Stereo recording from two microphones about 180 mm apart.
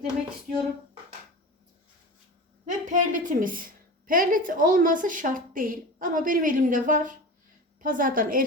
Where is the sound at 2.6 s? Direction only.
45° right (ahead or behind).